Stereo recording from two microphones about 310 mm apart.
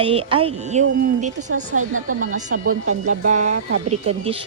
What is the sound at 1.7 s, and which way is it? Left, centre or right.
Speech, right.